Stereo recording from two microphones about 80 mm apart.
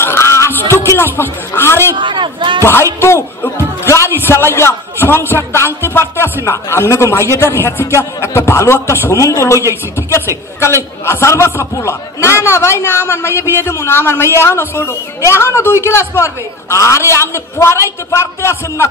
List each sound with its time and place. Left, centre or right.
0.0 s a sound: left
2.0 s a man's voice: right
2.6 s speech: left
9.1 s speech: left
11.1 s speech: left